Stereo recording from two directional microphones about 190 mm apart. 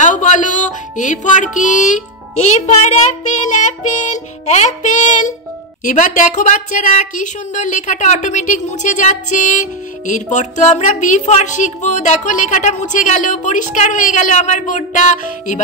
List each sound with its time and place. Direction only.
0.0 s speech: 40° left (ahead or behind)